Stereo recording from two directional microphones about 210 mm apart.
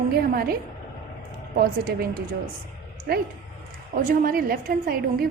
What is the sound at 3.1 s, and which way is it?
A woman's voice, 45° right (ahead or behind).